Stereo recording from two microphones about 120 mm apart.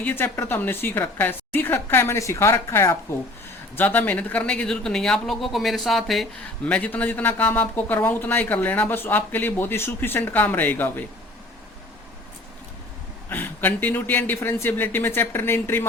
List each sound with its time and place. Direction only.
0.0 s a woman's voice: 15° left (ahead or behind); by 6.2 s centre (ahead or behind)
6.7 s a man's voice: 10° left (ahead or behind)
13.3 s a man's voice: 15° left (ahead or behind)